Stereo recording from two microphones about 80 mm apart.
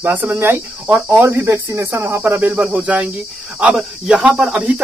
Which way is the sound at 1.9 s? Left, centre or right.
Right.